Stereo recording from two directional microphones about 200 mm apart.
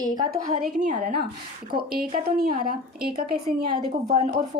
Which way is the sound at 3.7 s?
35° right (ahead or behind).